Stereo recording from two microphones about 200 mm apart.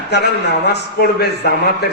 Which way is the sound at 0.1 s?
55° left (ahead or behind).